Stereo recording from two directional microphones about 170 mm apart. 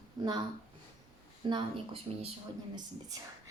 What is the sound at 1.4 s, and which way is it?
Speech, 30° right (ahead or behind).